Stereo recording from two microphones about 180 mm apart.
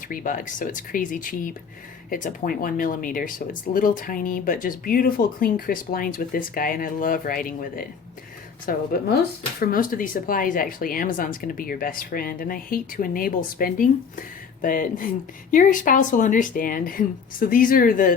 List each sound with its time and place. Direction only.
0.1 s a woman's voice: 50° left (ahead or behind)